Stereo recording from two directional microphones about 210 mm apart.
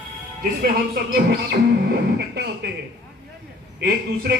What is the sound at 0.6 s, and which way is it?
A man's voice, 45° right (ahead or behind).